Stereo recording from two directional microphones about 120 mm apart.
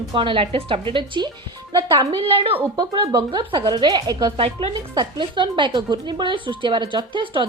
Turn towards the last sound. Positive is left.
turn(degrees=-40)  # may be behind; listen again after turning